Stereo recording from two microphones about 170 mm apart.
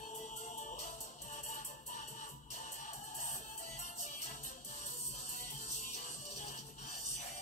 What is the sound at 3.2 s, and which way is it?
Music, 45° left (ahead or behind).